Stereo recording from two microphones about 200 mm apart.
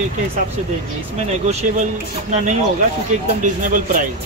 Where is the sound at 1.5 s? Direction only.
35° right (ahead or behind).